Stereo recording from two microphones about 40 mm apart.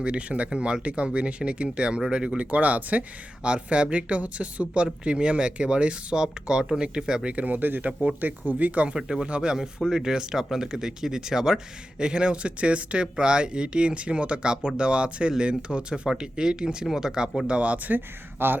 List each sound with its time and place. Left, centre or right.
0.0 s speech: right
2.4 s speech: right
7.3 s speech: right
8.9 s speech: centre
17.4 s speech: right
17.9 s speech: right